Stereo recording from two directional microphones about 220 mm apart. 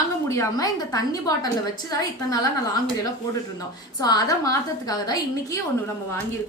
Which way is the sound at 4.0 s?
15° left (ahead or behind).